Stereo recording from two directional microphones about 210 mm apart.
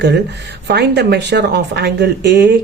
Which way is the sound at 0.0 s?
55° right (ahead or behind).